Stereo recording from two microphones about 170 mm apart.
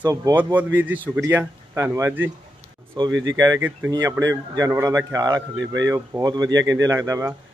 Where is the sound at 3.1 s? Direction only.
90° right.